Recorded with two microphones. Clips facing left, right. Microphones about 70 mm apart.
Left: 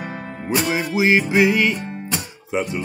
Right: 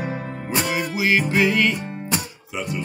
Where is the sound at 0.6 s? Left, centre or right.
Left.